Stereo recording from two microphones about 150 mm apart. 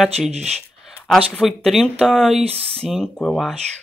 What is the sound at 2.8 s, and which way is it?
Speech, 5° left (ahead or behind).